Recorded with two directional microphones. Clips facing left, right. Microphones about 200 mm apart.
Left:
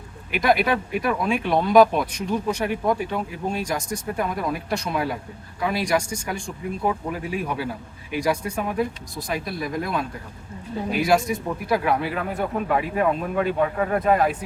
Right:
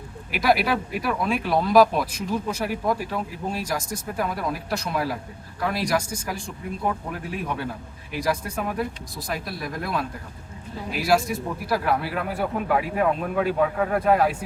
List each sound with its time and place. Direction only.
0.3 s speech: 5° right (ahead or behind)